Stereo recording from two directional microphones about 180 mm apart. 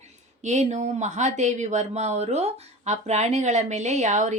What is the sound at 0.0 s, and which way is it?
Speech, 40° right (ahead or behind).